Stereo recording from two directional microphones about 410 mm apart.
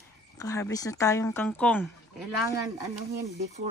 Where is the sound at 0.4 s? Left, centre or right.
Centre.